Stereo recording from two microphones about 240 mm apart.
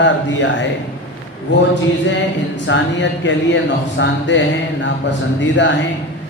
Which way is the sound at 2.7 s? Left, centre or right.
Left.